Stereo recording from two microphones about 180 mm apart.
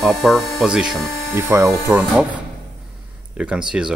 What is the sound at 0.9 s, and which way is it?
Speech, 15° right (ahead or behind).